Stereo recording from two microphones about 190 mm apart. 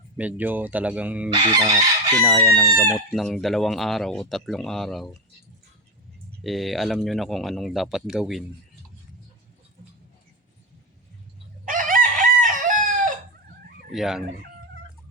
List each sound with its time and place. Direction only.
0.2 s speech: 10° right (ahead or behind)
1.3 s chicken: 20° right (ahead or behind)
2.5 s speech: centre (ahead or behind)
6.4 s speech: centre (ahead or behind)
11.6 s chicken: 45° right (ahead or behind)
13.9 s speech: centre (ahead or behind)